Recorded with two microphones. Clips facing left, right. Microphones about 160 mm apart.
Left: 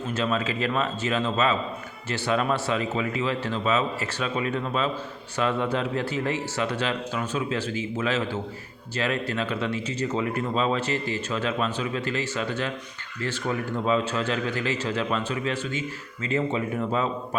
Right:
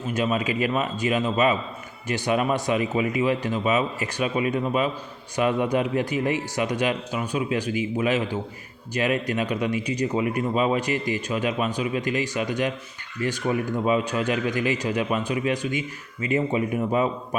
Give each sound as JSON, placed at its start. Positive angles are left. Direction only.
{"t": 0.1, "sound": "speech", "side_deg": -15}